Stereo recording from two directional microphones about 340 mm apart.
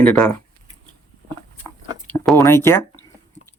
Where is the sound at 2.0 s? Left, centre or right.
Centre.